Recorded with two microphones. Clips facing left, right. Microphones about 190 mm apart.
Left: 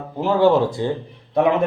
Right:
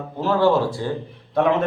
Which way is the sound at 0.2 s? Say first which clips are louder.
Left 2 dB; 15° left (ahead or behind).